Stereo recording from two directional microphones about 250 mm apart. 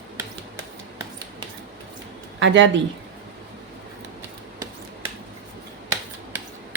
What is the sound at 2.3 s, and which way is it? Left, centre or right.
Speech, right.